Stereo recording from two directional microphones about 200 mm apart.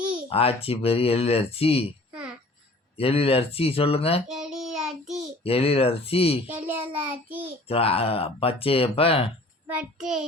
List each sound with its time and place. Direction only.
0.3 s speech: 30° left (ahead or behind)
3.0 s speech: 30° left (ahead or behind)
4.3 s child singing: centre (ahead or behind)
5.4 s speech: 30° left (ahead or behind)
6.5 s a child's voice: 10° right (ahead or behind)
6.9 s child singing: 10° right (ahead or behind)
7.7 s speech: 30° left (ahead or behind)
9.6 s child singing: 5° right (ahead or behind)